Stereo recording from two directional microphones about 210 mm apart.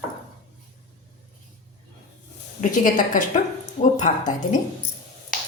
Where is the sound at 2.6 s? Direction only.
40° left (ahead or behind).